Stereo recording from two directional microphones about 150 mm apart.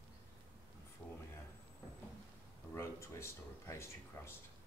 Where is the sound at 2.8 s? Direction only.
20° left (ahead or behind).